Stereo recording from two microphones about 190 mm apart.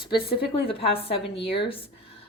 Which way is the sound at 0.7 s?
30° left (ahead or behind).